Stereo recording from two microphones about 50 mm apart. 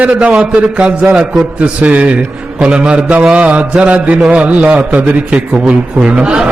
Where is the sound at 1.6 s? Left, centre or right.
Right.